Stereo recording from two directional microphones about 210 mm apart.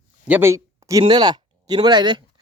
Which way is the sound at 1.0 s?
20° right (ahead or behind).